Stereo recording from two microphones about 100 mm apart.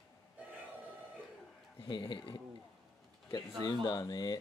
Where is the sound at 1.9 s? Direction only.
55° left (ahead or behind).